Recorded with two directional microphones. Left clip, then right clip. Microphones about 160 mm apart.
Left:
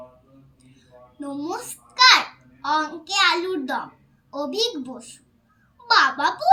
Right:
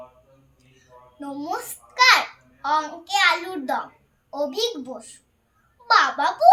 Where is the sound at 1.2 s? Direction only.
15° right (ahead or behind).